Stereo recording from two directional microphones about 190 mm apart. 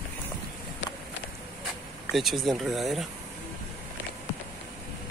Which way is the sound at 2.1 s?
Centre (ahead or behind).